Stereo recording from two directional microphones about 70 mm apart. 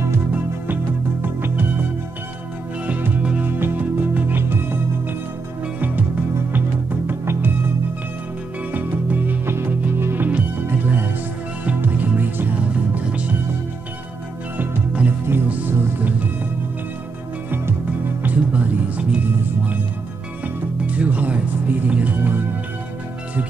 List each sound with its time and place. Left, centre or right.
1.2 s music: right
2.9 s music: centre
6.5 s music: right
8.7 s music: right
14.6 s music: right
18.2 s music: right
20.8 s music: centre